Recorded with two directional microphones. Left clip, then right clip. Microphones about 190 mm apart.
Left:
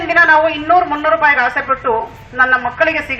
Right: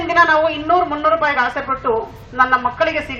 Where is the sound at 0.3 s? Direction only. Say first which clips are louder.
Left 3 dB; 75° right (ahead or behind).